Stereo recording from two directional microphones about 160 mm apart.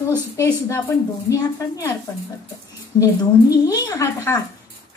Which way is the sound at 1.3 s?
15° left (ahead or behind).